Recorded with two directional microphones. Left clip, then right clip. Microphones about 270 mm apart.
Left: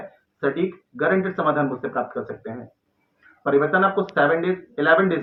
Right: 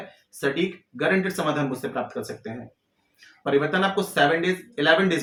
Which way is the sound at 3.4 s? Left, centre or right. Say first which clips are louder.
Left 4 dB; right.